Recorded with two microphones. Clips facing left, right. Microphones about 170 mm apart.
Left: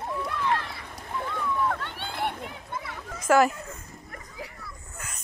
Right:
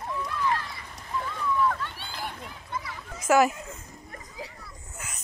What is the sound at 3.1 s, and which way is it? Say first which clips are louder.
Children playing: left 1 dB; 10° right (ahead or behind).